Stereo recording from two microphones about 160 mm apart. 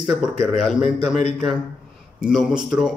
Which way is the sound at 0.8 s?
45° left (ahead or behind).